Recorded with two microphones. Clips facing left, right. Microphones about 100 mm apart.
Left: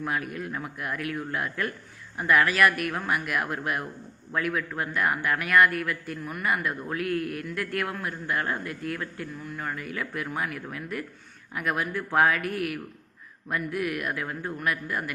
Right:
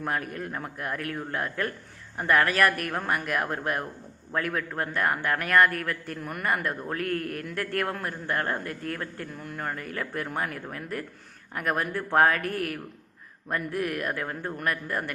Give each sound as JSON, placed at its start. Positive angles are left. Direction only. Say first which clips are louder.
{"t": 0.0, "sound": "a man's voice", "louder": "even", "side_deg": -45}